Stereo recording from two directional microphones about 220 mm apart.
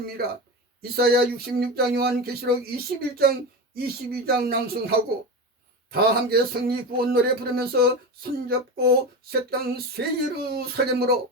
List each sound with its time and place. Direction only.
0.2 s speech: 45° right (ahead or behind)